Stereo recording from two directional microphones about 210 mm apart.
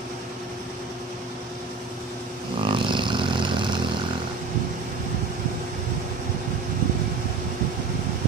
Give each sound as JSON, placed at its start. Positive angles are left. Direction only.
{"t": 2.6, "sound": "vehicle", "side_deg": -25}